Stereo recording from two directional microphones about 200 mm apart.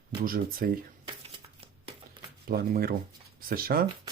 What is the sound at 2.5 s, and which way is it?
Speech, 50° right (ahead or behind).